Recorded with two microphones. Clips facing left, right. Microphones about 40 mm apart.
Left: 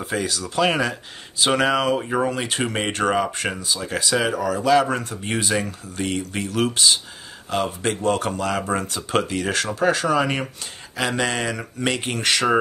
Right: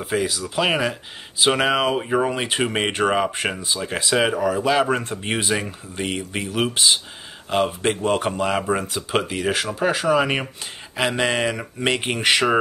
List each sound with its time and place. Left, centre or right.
0.0 s speech: centre